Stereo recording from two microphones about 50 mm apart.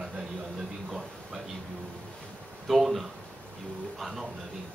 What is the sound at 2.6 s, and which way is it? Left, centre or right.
A man's voice, centre.